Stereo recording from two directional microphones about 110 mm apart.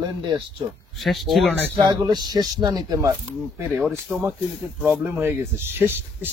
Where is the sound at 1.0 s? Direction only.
Centre (ahead or behind).